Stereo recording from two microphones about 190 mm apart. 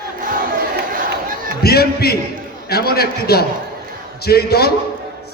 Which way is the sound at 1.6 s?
55° left (ahead or behind).